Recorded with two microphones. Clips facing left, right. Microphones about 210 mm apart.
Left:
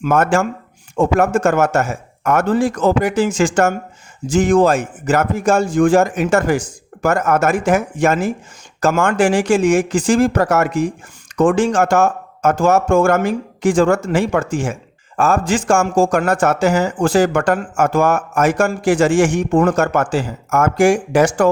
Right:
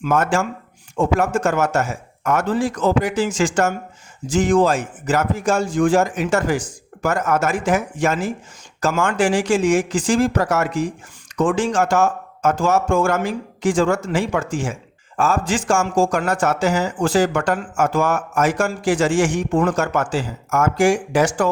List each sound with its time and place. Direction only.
0.0 s speech: 55° left (ahead or behind)
0.9 s speech: 45° left (ahead or behind)